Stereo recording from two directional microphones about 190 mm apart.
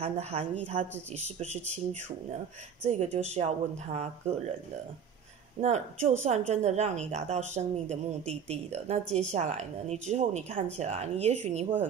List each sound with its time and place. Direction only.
0.0 s speech: 35° right (ahead or behind)
5.6 s speech: 40° right (ahead or behind)